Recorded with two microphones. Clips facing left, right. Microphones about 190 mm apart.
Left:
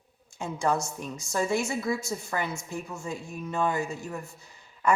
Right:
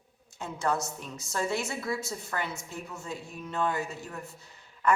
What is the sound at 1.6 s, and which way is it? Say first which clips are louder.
A woman's voice: left 4 dB; 10° left (ahead or behind).